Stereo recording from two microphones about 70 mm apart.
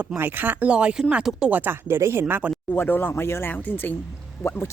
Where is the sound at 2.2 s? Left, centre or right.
Right.